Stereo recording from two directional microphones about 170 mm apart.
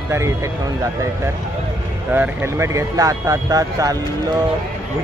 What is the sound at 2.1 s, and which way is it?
Speech, 15° right (ahead or behind).